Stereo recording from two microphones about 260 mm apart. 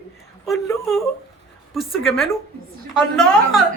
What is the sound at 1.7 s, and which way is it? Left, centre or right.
Speech, centre.